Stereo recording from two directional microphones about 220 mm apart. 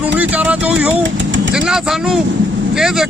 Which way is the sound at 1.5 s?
5° right (ahead or behind).